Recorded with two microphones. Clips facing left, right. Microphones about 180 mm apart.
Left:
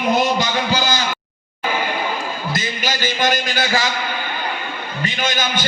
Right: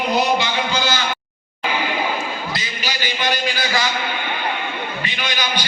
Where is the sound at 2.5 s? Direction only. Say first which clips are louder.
Left 4 dB; 45° left (ahead or behind).